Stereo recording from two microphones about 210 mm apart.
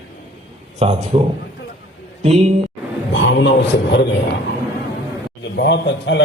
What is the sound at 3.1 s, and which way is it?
A man's voice, 60° left (ahead or behind).